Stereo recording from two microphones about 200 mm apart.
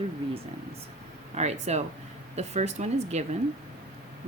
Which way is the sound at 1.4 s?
35° right (ahead or behind).